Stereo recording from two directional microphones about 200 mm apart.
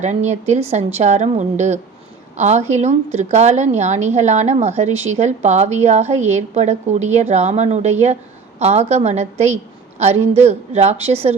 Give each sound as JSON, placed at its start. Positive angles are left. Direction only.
{"t": 0.0, "sound": "a woman's voice", "side_deg": -35}